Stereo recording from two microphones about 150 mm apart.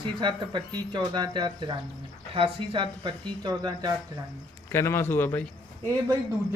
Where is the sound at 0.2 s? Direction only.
30° right (ahead or behind).